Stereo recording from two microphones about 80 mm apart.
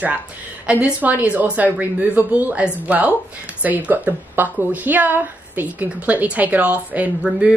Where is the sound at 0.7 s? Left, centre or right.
Centre.